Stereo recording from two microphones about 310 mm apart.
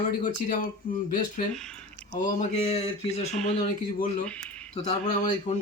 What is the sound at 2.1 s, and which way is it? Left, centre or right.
Speech, left.